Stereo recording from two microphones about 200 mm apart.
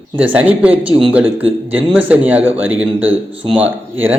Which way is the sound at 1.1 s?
10° right (ahead or behind).